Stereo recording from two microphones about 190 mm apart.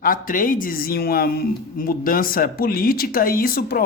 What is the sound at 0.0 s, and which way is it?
Speech, 45° left (ahead or behind).